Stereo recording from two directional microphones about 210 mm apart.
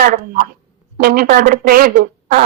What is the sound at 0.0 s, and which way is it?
Speech, 40° right (ahead or behind).